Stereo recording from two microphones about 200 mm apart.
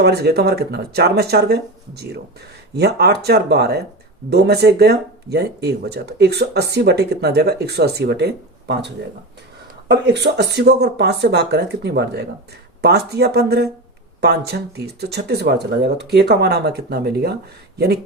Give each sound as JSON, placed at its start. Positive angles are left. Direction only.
{"t": 0.0, "sound": "speech", "side_deg": -55}
{"t": 10.1, "sound": "speech", "side_deg": -55}